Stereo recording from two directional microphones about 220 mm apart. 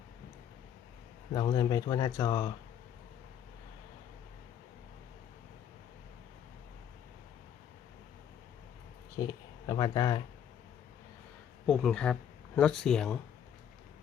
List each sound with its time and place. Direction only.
1.3 s speech: 20° left (ahead or behind)
9.1 s speech: 20° left (ahead or behind)
11.6 s speech: centre (ahead or behind)